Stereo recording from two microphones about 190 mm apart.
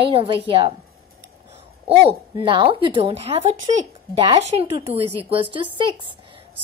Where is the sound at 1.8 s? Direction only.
25° right (ahead or behind).